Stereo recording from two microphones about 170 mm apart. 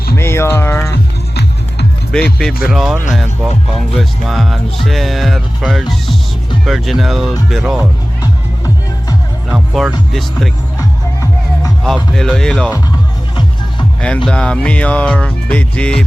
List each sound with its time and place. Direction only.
0.2 s speech: 15° left (ahead or behind)
2.4 s speech: 5° right (ahead or behind)
8.2 s music: 20° left (ahead or behind)
9.5 s music: 5° right (ahead or behind)
10.1 s speech: centre (ahead or behind)
10.8 s music: 20° left (ahead or behind)
11.8 s speech: centre (ahead or behind)
14.3 s music: 5° left (ahead or behind)